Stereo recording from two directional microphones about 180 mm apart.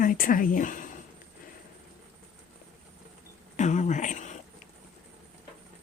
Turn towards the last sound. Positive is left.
turn(degrees=45)  # may be behind; listen again after turning